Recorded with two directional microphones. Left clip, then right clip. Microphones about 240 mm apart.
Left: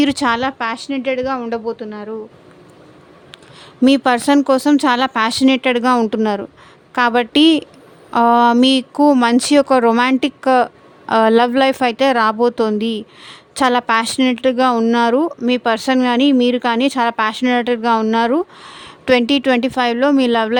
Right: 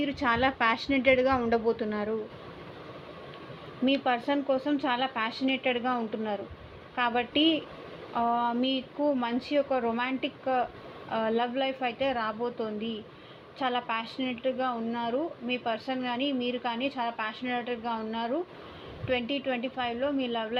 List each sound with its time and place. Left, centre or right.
0.0 s a woman's voice: left
3.8 s speech: left